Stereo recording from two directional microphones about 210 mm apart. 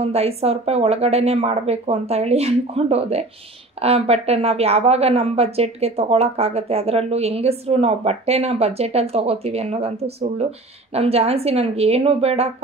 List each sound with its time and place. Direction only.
0.0 s speech: 30° right (ahead or behind)